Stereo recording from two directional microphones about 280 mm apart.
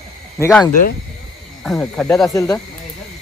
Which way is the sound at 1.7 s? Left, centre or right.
Centre.